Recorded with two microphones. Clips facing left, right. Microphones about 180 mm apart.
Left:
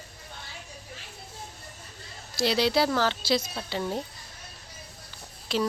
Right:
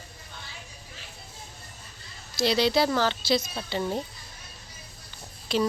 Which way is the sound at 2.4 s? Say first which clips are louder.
Right 1 dB; 5° left (ahead or behind).